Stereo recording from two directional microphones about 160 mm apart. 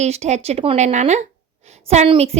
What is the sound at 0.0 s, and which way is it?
A woman's voice, 45° right (ahead or behind).